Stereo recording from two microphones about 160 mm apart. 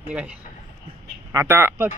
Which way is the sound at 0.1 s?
10° right (ahead or behind).